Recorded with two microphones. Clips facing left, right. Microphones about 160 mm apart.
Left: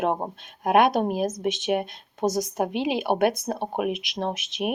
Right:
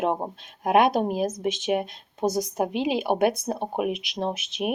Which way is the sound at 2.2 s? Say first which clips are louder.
Even; 10° right (ahead or behind).